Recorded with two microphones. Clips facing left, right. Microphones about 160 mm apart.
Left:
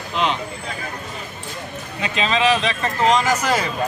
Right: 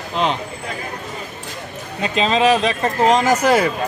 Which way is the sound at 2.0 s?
40° right (ahead or behind).